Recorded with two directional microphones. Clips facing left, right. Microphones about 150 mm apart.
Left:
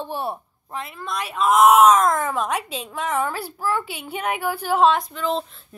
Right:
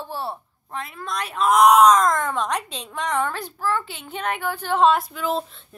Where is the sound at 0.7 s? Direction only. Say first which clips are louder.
Left 1 dB; centre (ahead or behind).